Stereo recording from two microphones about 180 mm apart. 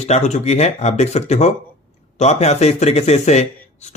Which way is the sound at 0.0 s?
40° left (ahead or behind).